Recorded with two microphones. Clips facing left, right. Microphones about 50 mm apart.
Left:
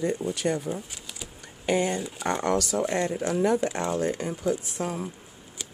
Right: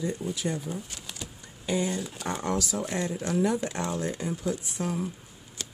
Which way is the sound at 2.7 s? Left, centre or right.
Left.